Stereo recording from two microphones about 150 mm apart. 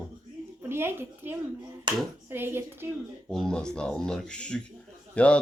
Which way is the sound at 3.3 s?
5° left (ahead or behind).